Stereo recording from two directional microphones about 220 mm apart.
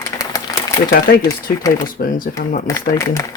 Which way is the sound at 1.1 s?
40° left (ahead or behind).